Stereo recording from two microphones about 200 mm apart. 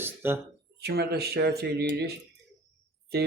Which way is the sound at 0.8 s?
55° right (ahead or behind).